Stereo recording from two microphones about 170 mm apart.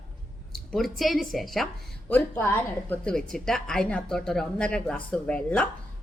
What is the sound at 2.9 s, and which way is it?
Speech, 5° left (ahead or behind).